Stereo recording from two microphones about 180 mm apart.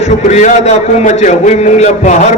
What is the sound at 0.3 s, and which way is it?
A man's voice, 40° left (ahead or behind).